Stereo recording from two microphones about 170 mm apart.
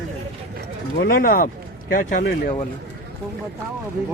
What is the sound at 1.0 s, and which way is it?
Speech, 60° left (ahead or behind).